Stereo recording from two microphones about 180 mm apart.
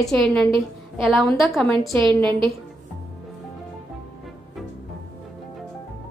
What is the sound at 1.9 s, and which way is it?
Speech, 25° right (ahead or behind).